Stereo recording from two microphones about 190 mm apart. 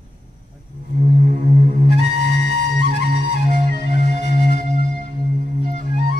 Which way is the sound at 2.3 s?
60° left (ahead or behind).